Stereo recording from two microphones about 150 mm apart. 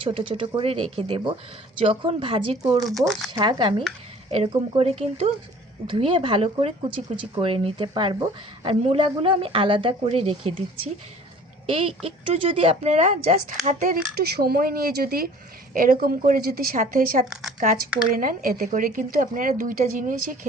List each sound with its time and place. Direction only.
0.1 s speech: 35° right (ahead or behind)
4.3 s speech: 45° right (ahead or behind)
11.7 s speech: 40° right (ahead or behind)
13.7 s speech: 70° right (ahead or behind)
15.7 s a woman's voice: 70° right (ahead or behind)